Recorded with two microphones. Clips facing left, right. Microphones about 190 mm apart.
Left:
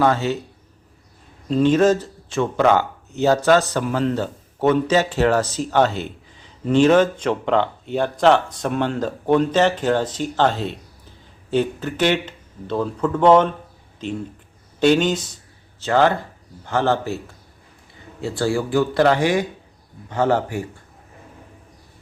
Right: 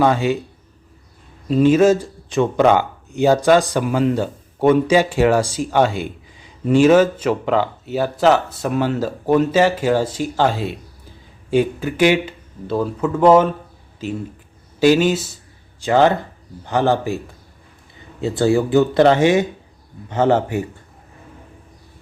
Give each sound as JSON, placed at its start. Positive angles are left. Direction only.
{"t": 0.0, "sound": "a man's voice", "side_deg": -15}
{"t": 1.5, "sound": "a man's voice", "side_deg": -10}
{"t": 15.8, "sound": "a man's voice", "side_deg": -15}
{"t": 18.2, "sound": "speech", "side_deg": -20}